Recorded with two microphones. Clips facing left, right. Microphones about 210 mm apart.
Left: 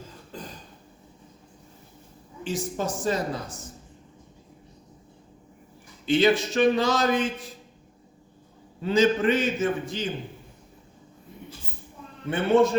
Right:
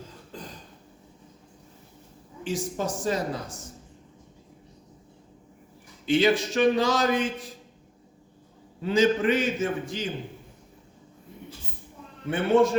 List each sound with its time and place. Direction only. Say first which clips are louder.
2.4 s a man's voice: even; 10° right (ahead or behind)
6.1 s a man's voice: left 1 dB; 10° right (ahead or behind)
8.8 s a man's voice: left 1 dB; 10° right (ahead or behind)
12.3 s a man's voice: left 1 dB; 10° right (ahead or behind)